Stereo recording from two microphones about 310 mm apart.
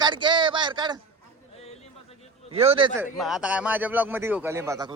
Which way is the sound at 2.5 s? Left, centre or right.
Centre.